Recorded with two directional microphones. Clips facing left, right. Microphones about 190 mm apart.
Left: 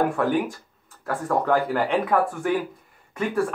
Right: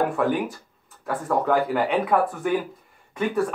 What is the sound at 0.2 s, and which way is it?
Speech, centre (ahead or behind).